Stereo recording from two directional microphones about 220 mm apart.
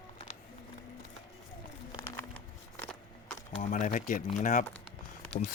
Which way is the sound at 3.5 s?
30° left (ahead or behind).